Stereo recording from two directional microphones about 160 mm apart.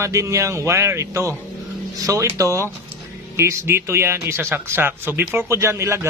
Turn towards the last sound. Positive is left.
turn(degrees=-15)  # may be behind; listen again after turning